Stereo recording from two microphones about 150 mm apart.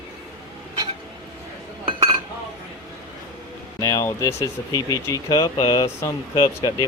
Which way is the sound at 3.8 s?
20° left (ahead or behind).